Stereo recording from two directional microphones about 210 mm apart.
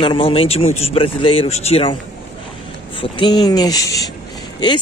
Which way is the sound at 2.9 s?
20° left (ahead or behind).